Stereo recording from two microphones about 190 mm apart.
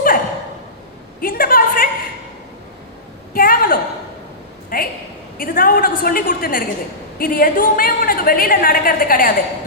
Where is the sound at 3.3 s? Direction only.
50° left (ahead or behind).